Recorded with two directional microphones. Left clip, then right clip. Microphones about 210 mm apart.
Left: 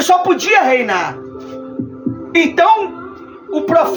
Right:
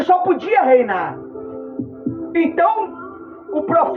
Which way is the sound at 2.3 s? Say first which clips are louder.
Left 5 dB; 20° left (ahead or behind).